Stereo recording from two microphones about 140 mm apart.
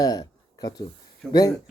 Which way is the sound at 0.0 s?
30° left (ahead or behind).